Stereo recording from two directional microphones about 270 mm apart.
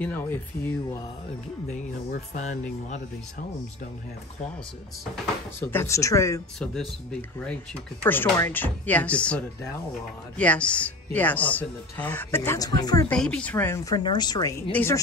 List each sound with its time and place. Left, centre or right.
0.0 s speech: centre
1.7 s speech: left
5.1 s speech: centre
13.1 s speech: centre